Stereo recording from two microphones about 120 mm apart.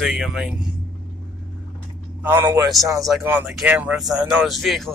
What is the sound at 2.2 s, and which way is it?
Speech, 20° right (ahead or behind).